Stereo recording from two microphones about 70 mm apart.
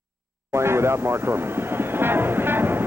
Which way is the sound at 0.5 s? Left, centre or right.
Right.